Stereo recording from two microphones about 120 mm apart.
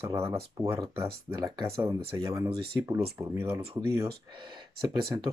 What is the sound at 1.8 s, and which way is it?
Speech, 25° right (ahead or behind).